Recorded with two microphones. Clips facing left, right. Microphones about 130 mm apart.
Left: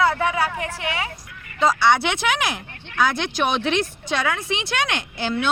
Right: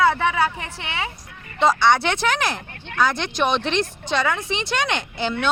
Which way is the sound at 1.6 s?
5° left (ahead or behind).